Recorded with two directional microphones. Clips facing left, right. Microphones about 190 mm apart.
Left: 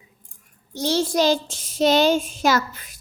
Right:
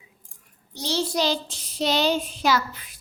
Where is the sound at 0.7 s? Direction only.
50° left (ahead or behind).